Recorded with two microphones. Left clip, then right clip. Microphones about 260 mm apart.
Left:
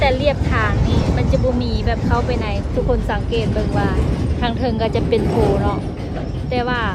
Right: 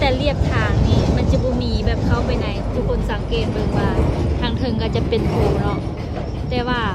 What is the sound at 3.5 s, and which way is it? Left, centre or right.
Speech, left.